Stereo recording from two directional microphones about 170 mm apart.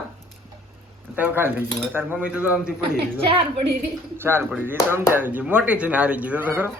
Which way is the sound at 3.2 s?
35° right (ahead or behind).